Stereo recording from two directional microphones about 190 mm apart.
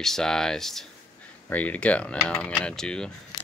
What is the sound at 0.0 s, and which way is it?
Speech, centre (ahead or behind).